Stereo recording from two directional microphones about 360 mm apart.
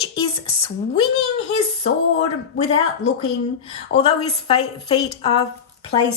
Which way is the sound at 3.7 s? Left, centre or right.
Centre.